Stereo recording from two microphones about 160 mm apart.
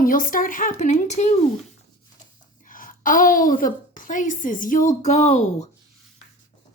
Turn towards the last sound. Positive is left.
turn(degrees=45)  # may be behind; listen again after turning